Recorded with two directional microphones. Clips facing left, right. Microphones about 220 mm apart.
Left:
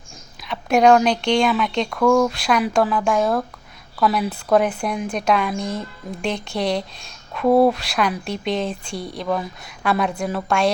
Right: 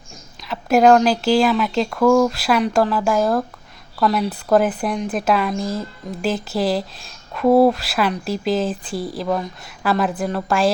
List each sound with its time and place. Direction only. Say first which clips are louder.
0.4 s speech: right 1 dB; centre (ahead or behind)